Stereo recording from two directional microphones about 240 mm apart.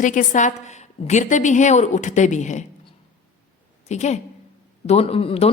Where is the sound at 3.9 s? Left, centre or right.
Left.